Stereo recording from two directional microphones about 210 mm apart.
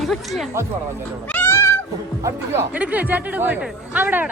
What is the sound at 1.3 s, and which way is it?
Cat, 10° left (ahead or behind).